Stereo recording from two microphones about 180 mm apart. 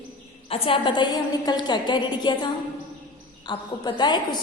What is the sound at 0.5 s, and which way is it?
A woman's voice, 30° left (ahead or behind).